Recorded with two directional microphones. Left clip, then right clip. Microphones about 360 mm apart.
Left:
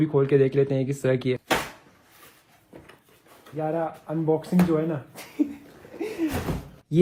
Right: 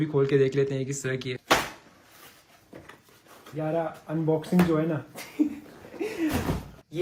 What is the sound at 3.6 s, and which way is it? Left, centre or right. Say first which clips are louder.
Speech: left 2 dB; centre.